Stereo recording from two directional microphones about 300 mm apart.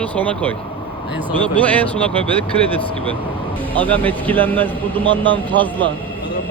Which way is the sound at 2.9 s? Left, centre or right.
Centre.